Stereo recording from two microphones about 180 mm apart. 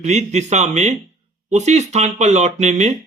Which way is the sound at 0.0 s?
40° right (ahead or behind).